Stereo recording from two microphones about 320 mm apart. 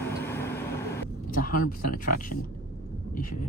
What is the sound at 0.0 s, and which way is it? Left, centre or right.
Vehicle, centre.